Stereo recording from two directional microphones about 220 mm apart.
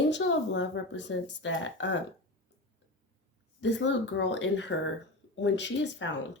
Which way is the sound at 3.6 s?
55° left (ahead or behind).